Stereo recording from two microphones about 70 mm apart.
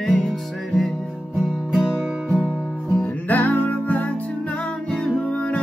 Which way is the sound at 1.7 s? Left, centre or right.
Centre.